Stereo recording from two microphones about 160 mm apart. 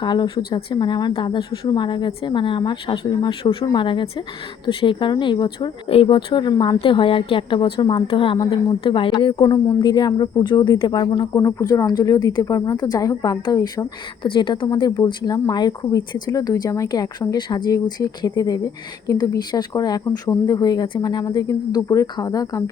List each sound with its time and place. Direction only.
0.0 s speech: 30° left (ahead or behind)